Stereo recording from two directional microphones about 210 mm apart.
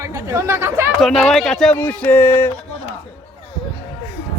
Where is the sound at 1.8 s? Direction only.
10° left (ahead or behind).